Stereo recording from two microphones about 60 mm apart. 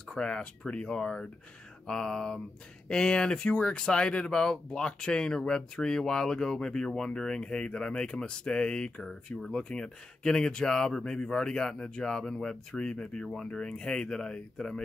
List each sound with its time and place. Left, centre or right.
0.1 s speech: centre